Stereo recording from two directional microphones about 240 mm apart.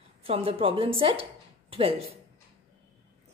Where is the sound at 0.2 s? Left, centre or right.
Right.